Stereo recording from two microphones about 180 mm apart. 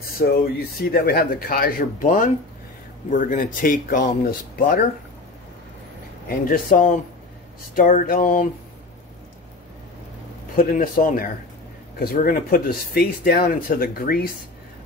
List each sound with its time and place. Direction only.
0.2 s speech: 55° left (ahead or behind)
6.2 s speech: 50° left (ahead or behind)
10.5 s speech: 55° left (ahead or behind)